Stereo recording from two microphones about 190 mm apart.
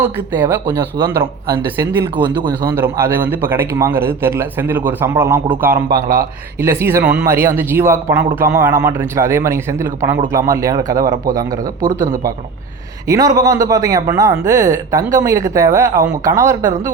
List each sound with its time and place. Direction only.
0.3 s a man's voice: 10° right (ahead or behind)
2.6 s a man's voice: 15° right (ahead or behind)
13.1 s a man's voice: 20° right (ahead or behind)